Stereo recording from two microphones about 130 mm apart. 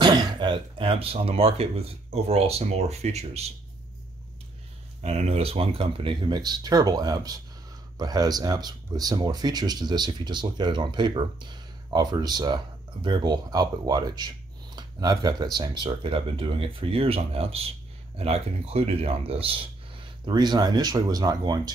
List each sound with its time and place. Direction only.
0.0 s speech: 35° right (ahead or behind); by 3.5 s 55° right (ahead or behind)
5.0 s speech: 55° right (ahead or behind)
20.2 s speech: 35° right (ahead or behind)